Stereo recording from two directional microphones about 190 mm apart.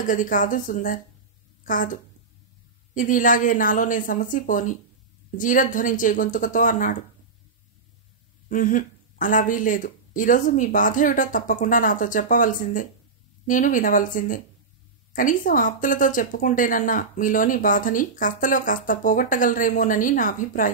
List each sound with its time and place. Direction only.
0.0 s a woman's voice: 45° left (ahead or behind)
8.5 s speech: 45° left (ahead or behind)